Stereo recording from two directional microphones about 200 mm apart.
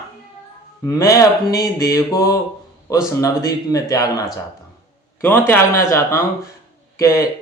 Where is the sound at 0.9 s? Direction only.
15° left (ahead or behind).